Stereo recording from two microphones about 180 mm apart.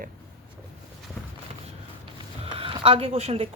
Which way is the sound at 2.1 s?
30° right (ahead or behind).